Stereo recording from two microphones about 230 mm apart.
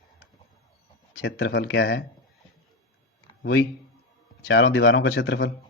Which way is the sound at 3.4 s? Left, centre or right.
Left.